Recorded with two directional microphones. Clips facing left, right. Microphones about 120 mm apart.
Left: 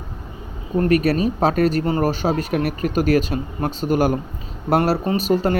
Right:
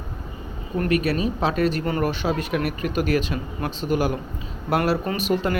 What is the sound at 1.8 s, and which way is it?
Speech, 35° left (ahead or behind).